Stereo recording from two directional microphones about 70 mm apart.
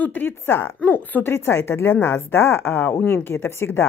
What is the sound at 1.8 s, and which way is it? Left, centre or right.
A woman's voice, left.